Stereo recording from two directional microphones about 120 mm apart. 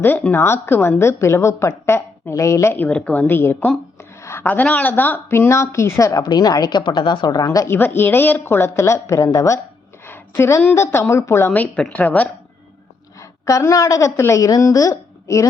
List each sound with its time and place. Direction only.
0.0 s a woman's voice: 20° left (ahead or behind)
13.1 s a woman's voice: 25° left (ahead or behind)